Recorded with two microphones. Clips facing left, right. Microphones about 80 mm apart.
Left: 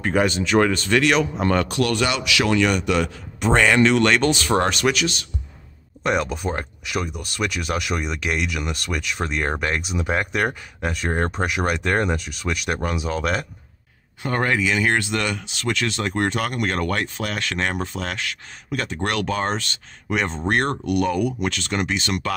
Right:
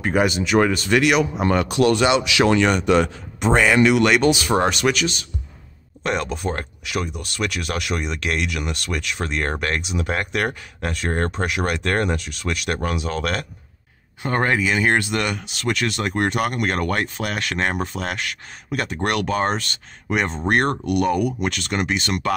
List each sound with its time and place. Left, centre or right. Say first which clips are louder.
0.0 s speech: right 1 dB; centre; by 3.4 s right
3.5 s speech: right 1 dB; centre
14.3 s speech: right 1 dB; right
15.0 s speech: right 1 dB; centre